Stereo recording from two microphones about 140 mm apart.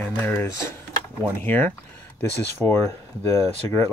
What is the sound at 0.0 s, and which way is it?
Speech, 15° left (ahead or behind).